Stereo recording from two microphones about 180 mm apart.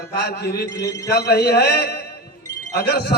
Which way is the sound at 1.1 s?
60° left (ahead or behind).